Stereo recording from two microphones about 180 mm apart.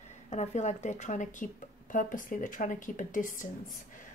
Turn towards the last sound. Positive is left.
turn(degrees=45)  # may be behind; listen again after turning